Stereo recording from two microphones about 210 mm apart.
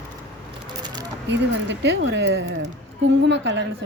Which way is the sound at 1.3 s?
55° right (ahead or behind).